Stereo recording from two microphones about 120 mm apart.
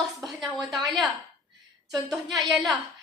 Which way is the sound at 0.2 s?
Centre (ahead or behind).